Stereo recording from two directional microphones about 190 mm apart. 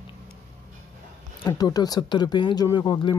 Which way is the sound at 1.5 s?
20° left (ahead or behind).